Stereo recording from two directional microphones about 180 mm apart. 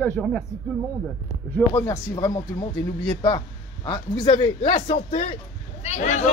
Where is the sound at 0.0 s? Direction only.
5° left (ahead or behind).